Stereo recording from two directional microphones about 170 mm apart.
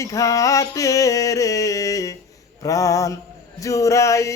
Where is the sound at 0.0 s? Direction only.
20° left (ahead or behind).